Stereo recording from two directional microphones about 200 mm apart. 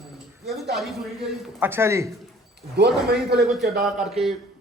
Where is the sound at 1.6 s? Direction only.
10° right (ahead or behind).